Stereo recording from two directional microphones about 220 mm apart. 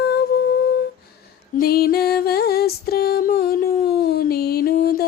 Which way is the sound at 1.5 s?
45° left (ahead or behind).